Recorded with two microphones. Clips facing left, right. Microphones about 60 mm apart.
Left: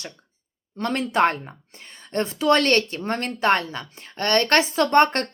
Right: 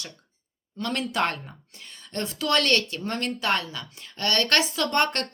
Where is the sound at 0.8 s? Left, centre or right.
Left.